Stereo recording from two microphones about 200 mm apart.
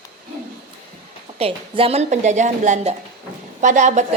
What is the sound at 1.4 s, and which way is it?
A woman's voice, 30° right (ahead or behind).